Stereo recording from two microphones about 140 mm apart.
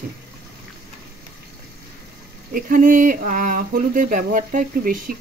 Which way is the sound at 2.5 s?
75° right (ahead or behind).